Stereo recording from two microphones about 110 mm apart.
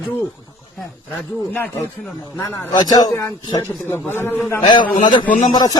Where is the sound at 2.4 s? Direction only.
30° left (ahead or behind).